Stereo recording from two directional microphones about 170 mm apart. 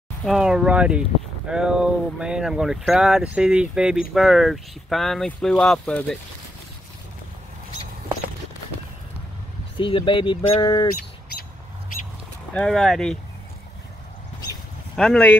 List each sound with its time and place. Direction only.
0.2 s speech: 5° right (ahead or behind)
9.8 s speech: 30° left (ahead or behind)
11.0 s bird: 60° left (ahead or behind)
12.5 s speech: 5° left (ahead or behind)
15.0 s speech: 5° left (ahead or behind)